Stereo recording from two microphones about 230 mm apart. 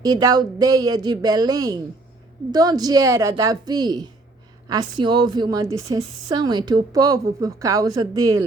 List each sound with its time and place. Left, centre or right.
0.0 s a woman's voice: centre